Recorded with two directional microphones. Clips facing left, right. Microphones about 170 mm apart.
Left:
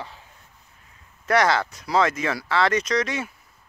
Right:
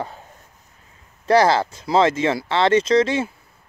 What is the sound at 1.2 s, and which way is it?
Speech, 30° right (ahead or behind).